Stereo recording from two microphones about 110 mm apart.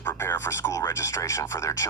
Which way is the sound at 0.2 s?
25° left (ahead or behind).